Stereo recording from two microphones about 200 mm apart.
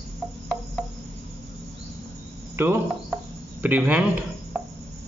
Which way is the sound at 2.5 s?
10° right (ahead or behind).